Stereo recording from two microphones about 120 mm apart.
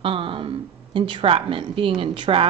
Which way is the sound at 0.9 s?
45° right (ahead or behind).